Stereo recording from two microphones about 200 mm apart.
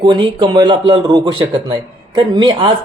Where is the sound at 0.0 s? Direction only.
25° right (ahead or behind).